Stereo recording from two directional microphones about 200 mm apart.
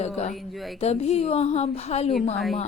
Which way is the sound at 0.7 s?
30° left (ahead or behind).